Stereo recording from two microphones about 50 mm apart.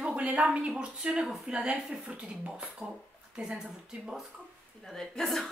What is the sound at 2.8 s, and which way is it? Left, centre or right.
Speech, right.